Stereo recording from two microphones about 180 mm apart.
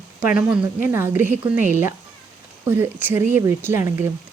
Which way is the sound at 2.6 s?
10° right (ahead or behind).